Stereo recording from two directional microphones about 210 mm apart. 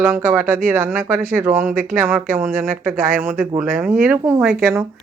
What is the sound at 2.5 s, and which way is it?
Speech, 40° right (ahead or behind).